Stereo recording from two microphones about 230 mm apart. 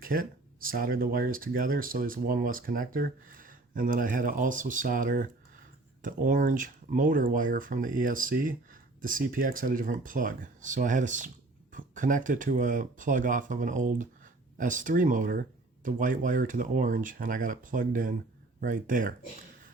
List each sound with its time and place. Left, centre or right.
0.0 s speech: right